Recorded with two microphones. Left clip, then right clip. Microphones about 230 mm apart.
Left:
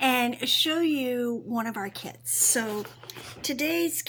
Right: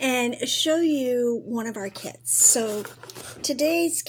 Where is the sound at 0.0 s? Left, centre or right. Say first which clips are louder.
Even; centre.